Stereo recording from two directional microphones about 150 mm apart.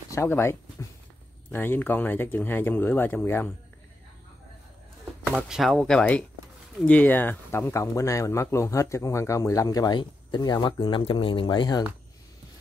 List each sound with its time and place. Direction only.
0.1 s speech: 15° left (ahead or behind)
5.2 s speech: centre (ahead or behind); by 11.8 s 30° left (ahead or behind)